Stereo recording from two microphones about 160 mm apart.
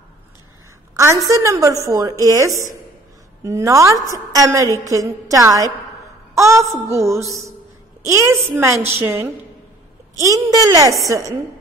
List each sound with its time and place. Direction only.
0.9 s a sound: 20° right (ahead or behind)
1.3 s a woman's voice: 20° right (ahead or behind)
6.7 s a woman's voice: 20° right (ahead or behind)